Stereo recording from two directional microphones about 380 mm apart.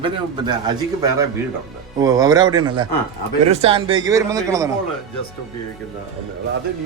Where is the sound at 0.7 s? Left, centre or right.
Centre.